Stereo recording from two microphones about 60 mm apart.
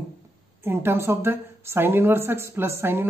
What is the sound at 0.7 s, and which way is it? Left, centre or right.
A woman's voice, right.